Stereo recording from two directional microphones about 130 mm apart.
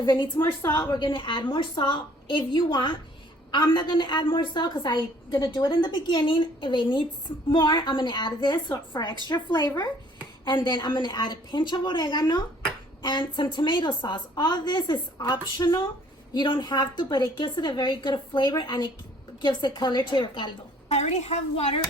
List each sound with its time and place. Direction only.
0.0 s a woman's voice: 35° left (ahead or behind)
0.3 s a woman's voice: 20° left (ahead or behind)
0.8 s a woman's voice: 35° left (ahead or behind)
20.9 s speech: 55° left (ahead or behind)